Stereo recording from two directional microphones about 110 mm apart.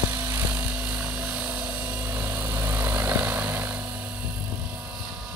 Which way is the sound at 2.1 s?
15° right (ahead or behind).